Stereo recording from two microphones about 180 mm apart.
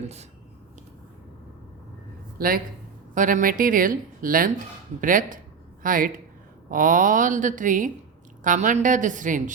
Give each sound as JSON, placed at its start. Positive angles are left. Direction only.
{"t": 0.0, "sound": "speech", "side_deg": -35}
{"t": 2.4, "sound": "a woman's voice", "side_deg": -55}